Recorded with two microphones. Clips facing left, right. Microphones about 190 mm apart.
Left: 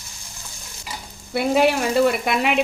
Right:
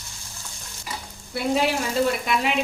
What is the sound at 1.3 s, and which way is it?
Speech, 65° left (ahead or behind).